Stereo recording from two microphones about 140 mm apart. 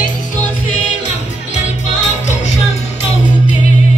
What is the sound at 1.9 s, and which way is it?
Music, 55° left (ahead or behind).